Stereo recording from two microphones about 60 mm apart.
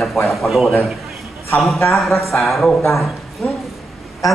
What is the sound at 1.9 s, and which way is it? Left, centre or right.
Speech, centre.